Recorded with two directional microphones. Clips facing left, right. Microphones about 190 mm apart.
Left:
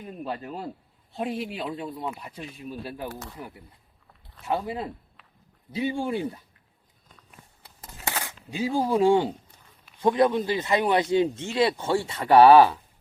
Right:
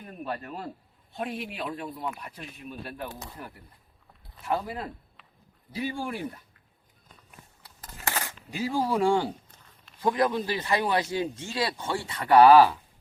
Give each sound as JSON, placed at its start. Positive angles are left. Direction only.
{"t": 0.0, "sound": "a man's voice", "side_deg": 20}
{"t": 1.1, "sound": "speech", "side_deg": 30}
{"t": 3.4, "sound": "speech", "side_deg": 15}
{"t": 8.2, "sound": "speech", "side_deg": 15}